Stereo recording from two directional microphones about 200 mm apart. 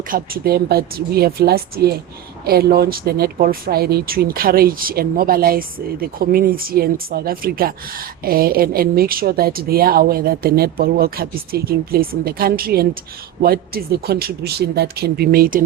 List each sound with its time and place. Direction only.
0.1 s speech: 50° right (ahead or behind)